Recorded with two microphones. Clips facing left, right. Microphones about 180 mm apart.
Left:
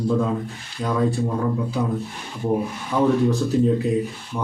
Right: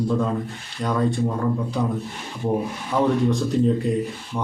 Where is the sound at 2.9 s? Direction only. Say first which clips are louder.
Left 1 dB; centre (ahead or behind).